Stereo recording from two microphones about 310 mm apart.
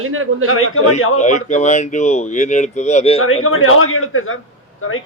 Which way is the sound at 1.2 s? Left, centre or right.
Left.